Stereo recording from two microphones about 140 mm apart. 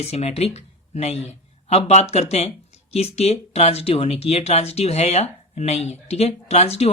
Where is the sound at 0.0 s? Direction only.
50° left (ahead or behind).